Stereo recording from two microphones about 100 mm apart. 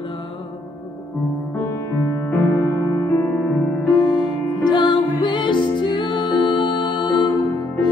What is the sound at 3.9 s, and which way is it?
Music, 45° left (ahead or behind).